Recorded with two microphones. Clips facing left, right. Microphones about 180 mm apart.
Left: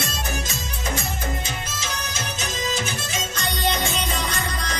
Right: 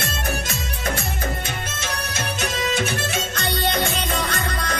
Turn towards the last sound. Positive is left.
turn(degrees=-60)  # may be behind; listen again after turning